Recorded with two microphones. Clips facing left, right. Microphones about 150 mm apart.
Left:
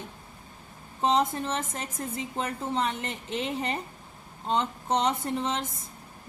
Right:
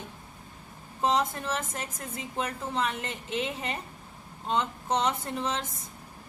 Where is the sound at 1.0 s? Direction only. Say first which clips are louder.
Left 2 dB; 25° left (ahead or behind).